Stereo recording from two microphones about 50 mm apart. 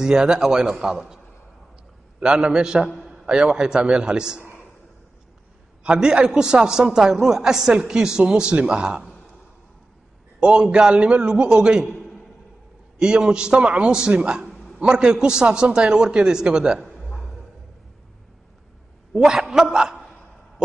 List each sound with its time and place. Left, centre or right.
0.0 s a man's voice: centre
5.9 s a man's voice: centre
10.4 s a man's voice: centre
12.0 s a sound: centre
13.0 s a man's voice: centre
14.5 s a sound: centre
14.8 s a man's voice: centre
16.8 s a sound: centre
19.1 s a man's voice: centre